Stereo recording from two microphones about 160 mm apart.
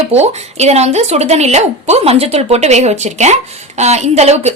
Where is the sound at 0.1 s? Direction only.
45° right (ahead or behind).